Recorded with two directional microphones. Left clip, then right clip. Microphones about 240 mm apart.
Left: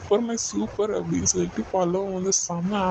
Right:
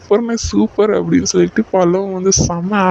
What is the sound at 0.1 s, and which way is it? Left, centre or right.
Speech, right.